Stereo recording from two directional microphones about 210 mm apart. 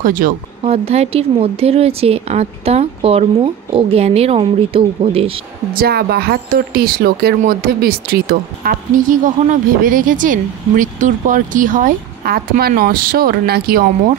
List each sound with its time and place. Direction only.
0.0 s speech: 40° right (ahead or behind)
0.7 s speech: 30° right (ahead or behind)
5.7 s a woman's voice: 45° right (ahead or behind)